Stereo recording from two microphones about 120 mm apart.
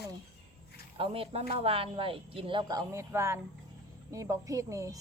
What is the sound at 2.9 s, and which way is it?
Speech, 20° right (ahead or behind).